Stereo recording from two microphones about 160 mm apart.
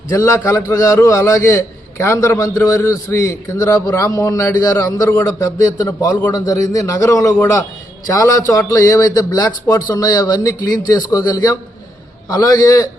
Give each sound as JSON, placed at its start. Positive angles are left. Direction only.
{"t": 0.1, "sound": "a man's voice", "side_deg": 20}